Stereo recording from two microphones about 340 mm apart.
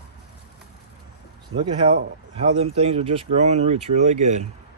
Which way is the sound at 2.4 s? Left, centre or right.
Centre.